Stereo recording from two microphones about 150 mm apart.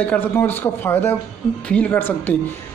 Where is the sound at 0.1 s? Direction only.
15° left (ahead or behind).